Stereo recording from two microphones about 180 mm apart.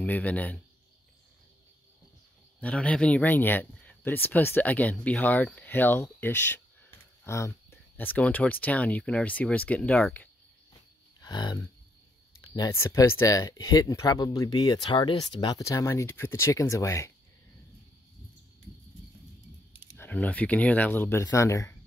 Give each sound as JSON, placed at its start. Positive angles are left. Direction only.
{"t": 0.0, "sound": "speech", "side_deg": 10}
{"t": 2.6, "sound": "speech", "side_deg": 5}
{"t": 11.1, "sound": "speech", "side_deg": 20}
{"t": 19.7, "sound": "a sound", "side_deg": -10}
{"t": 20.0, "sound": "speech", "side_deg": 10}